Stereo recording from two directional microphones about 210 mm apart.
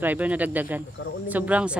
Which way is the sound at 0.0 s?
5° right (ahead or behind).